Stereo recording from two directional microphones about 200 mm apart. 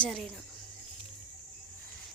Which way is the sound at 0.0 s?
Centre (ahead or behind).